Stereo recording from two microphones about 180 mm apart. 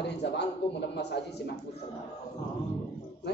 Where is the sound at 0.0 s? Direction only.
70° left (ahead or behind).